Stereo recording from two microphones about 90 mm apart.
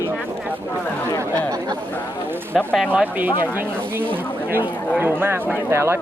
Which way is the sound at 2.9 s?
20° right (ahead or behind).